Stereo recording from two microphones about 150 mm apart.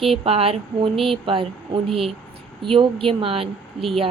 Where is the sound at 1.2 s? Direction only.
35° right (ahead or behind).